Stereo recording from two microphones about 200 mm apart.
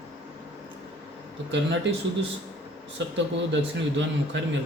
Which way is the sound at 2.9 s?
65° right (ahead or behind).